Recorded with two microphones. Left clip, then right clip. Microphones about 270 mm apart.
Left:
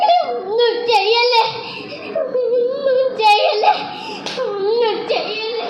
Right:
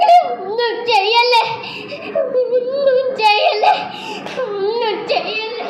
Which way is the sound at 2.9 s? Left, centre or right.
Right.